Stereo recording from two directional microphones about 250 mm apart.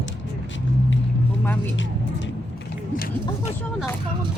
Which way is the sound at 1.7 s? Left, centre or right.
Left.